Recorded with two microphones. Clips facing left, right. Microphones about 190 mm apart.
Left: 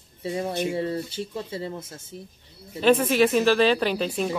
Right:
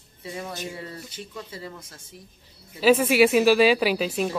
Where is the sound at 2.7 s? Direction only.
5° right (ahead or behind).